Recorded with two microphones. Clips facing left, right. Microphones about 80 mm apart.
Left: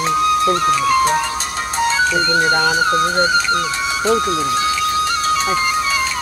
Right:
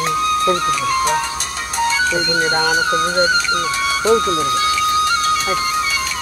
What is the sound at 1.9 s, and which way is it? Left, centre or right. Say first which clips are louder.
Speech: left 2 dB; left.